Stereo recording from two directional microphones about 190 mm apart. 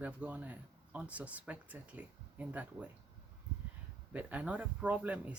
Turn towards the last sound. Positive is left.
turn(degrees=-5)  # may be behind; listen again after turning